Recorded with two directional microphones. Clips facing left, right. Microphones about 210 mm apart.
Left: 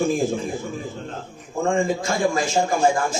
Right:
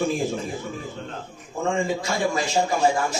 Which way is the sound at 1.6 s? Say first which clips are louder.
Left 3 dB; 50° left (ahead or behind).